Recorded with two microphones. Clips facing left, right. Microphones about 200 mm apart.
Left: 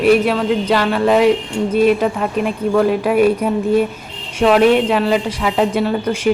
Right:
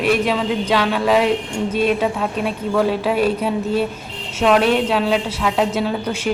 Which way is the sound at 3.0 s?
10° left (ahead or behind).